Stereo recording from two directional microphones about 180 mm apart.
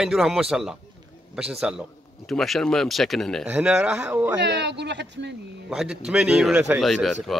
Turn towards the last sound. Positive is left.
turn(degrees=0)  # may be behind; listen again after turning